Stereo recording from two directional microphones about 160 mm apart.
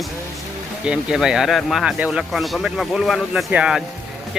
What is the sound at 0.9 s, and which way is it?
Speech, 5° right (ahead or behind).